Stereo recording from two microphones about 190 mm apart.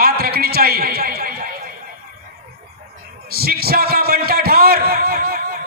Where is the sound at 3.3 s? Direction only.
55° right (ahead or behind).